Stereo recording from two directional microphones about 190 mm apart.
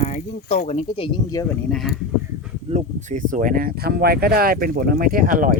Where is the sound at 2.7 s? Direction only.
40° right (ahead or behind).